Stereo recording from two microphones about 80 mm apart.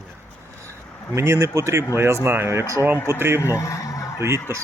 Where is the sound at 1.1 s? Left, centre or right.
Right.